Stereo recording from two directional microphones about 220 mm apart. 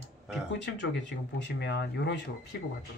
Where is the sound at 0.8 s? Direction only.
50° left (ahead or behind).